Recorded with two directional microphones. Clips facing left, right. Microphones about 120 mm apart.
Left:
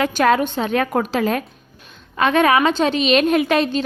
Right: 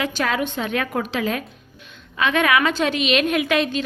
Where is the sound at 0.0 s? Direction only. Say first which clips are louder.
Left 6 dB; 45° left (ahead or behind).